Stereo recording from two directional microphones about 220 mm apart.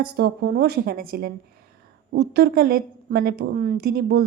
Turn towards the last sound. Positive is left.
turn(degrees=-45)  # may be behind; listen again after turning